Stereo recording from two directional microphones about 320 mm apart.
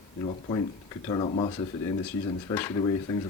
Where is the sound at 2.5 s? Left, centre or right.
Centre.